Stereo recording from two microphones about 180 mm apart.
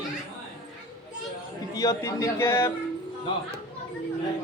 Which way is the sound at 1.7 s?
15° left (ahead or behind).